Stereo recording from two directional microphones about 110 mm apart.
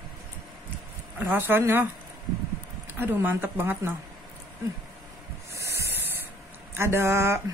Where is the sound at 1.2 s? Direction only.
20° right (ahead or behind).